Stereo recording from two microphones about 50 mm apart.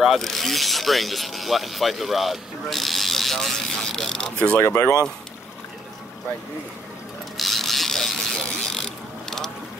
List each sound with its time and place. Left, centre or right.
0.0 s speech: centre
4.6 s speech: left
7.3 s mechanisms: centre